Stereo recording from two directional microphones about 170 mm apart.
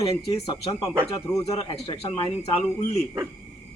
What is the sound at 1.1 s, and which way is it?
A man's voice, 20° left (ahead or behind).